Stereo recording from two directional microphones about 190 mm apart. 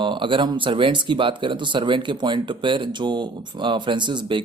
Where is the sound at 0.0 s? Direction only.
25° right (ahead or behind).